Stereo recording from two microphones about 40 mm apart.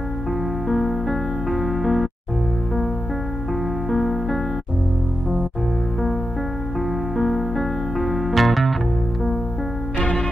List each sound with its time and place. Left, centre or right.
0.7 s music: centre
3.9 s music: centre
7.2 s music: centre
9.9 s music: centre